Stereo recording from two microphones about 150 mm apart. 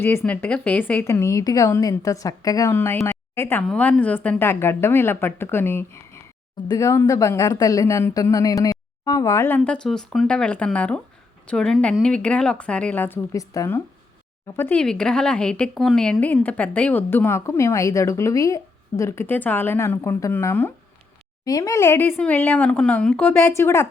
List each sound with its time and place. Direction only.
0.0 s a woman's voice: 15° left (ahead or behind)
9.6 s a woman's voice: 5° left (ahead or behind)